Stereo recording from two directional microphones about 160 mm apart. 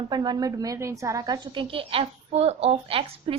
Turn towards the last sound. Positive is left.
turn(degrees=-35)  # may be behind; listen again after turning